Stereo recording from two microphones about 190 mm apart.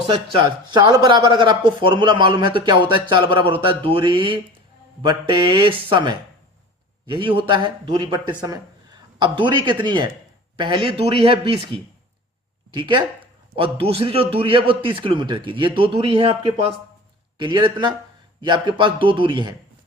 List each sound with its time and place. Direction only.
0.1 s a man's voice: 30° right (ahead or behind)
12.7 s speech: 25° right (ahead or behind)